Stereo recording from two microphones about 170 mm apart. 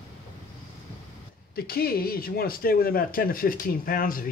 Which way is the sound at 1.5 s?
65° left (ahead or behind).